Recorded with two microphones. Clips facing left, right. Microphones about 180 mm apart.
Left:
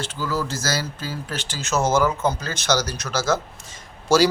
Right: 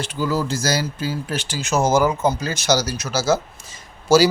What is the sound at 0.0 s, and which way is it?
A man's voice, 15° right (ahead or behind).